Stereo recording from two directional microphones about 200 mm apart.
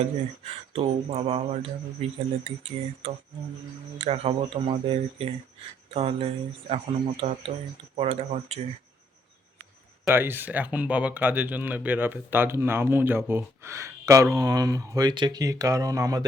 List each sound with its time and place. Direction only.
0.0 s speech: 30° right (ahead or behind)
10.1 s speech: 10° right (ahead or behind)